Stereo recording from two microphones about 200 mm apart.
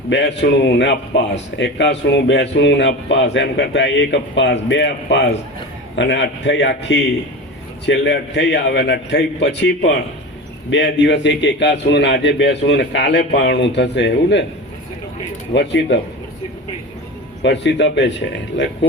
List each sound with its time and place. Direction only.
0.1 s speech: 60° left (ahead or behind)
15.5 s speech: 60° left (ahead or behind)
17.4 s speech: 60° left (ahead or behind)